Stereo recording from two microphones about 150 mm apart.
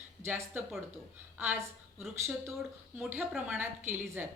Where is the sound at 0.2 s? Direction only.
15° right (ahead or behind).